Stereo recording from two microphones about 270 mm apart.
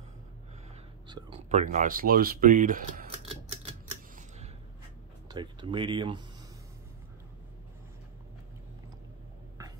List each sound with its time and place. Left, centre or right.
1.0 s speech: centre
5.3 s speech: centre